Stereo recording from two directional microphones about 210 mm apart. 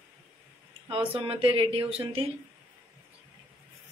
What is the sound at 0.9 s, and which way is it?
Speech, 25° right (ahead or behind).